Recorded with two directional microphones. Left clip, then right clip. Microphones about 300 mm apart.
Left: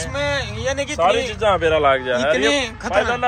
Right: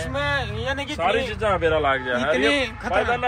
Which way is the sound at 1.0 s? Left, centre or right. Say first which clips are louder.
Left 5 dB; left.